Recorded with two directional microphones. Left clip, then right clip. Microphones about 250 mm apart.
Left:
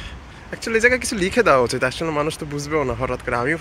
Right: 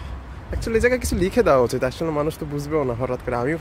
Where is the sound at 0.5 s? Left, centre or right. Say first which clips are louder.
Left 2 dB; centre.